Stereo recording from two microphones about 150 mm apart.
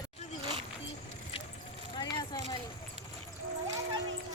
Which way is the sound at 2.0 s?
25° left (ahead or behind).